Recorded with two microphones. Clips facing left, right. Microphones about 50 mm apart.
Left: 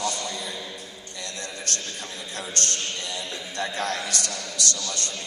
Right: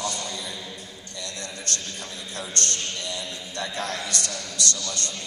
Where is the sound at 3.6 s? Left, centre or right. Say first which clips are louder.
Left 2 dB; left.